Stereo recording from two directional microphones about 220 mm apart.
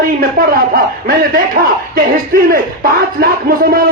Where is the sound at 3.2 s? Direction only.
40° right (ahead or behind).